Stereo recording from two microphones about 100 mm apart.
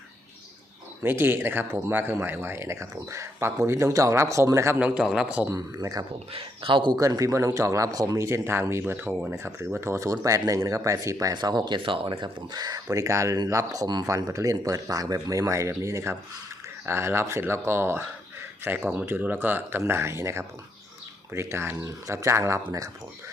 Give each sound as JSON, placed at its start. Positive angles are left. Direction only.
{"t": 1.0, "sound": "speech", "side_deg": -20}
{"t": 4.8, "sound": "a man's voice", "side_deg": -10}
{"t": 5.5, "sound": "speech", "side_deg": -35}
{"t": 6.3, "sound": "a man's voice", "side_deg": -60}
{"t": 6.9, "sound": "speech", "side_deg": -35}